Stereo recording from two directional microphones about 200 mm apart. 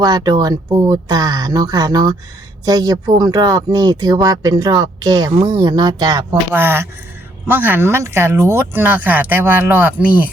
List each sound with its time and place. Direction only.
0.0 s speech: 20° right (ahead or behind)